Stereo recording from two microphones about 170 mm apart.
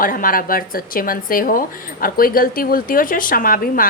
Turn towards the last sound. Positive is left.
turn(degrees=55)  # may be behind; listen again after turning